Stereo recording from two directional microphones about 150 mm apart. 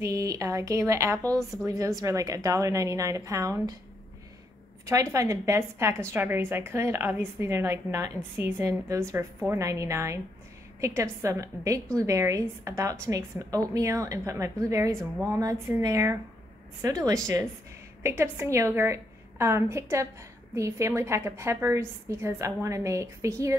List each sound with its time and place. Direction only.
0.0 s a woman's voice: 20° right (ahead or behind)
4.8 s a woman's voice: 20° right (ahead or behind)